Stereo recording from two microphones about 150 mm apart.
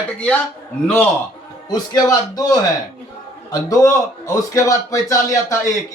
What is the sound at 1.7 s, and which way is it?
A man's voice, 25° left (ahead or behind).